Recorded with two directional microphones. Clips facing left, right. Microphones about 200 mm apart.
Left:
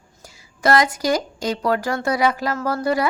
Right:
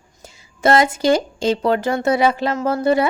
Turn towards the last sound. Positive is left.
turn(degrees=-25)  # may be behind; listen again after turning